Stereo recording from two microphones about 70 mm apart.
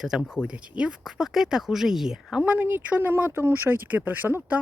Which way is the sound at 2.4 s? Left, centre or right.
Centre.